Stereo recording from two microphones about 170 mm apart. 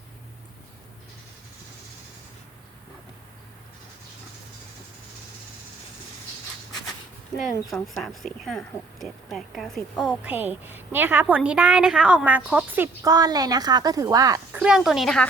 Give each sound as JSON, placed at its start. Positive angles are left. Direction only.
{"t": 7.9, "sound": "a woman's voice", "side_deg": 0}
{"t": 13.1, "sound": "a woman's voice", "side_deg": -25}
{"t": 14.5, "sound": "speech", "side_deg": -5}